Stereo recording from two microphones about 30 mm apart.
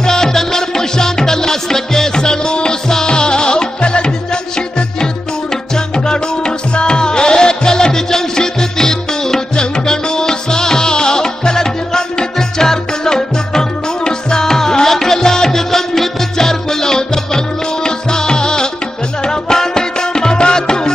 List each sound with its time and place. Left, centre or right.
0.0 s music: centre